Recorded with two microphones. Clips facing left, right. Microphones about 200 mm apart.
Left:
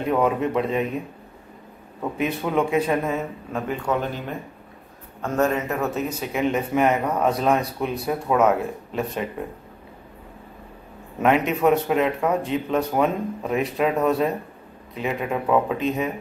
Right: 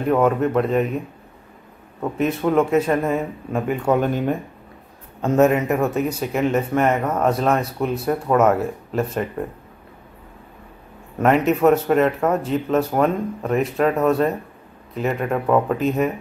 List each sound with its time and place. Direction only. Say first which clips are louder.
0.1 s speech: right 4 dB; centre (ahead or behind)
2.1 s speech: right 5 dB; centre (ahead or behind)
3.8 s speech: right 6 dB; 50° right (ahead or behind)
5.2 s speech: right 6 dB; 20° right (ahead or behind); by 9.2 s centre (ahead or behind)
11.1 s speech: right 3 dB; centre (ahead or behind)